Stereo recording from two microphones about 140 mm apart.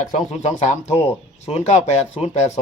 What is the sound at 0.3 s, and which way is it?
Speech, 55° left (ahead or behind).